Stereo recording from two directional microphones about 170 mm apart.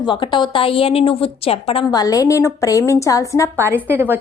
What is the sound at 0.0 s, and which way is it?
A woman's voice, 30° left (ahead or behind).